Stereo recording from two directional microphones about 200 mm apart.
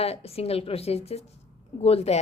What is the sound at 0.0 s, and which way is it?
A woman's voice, 30° left (ahead or behind).